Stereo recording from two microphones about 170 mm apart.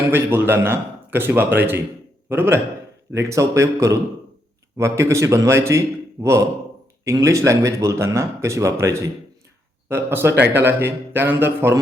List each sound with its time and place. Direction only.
0.1 s speech: 15° right (ahead or behind)